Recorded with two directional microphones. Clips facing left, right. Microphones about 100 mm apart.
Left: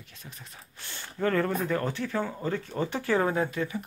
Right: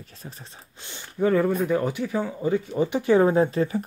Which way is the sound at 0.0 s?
35° right (ahead or behind).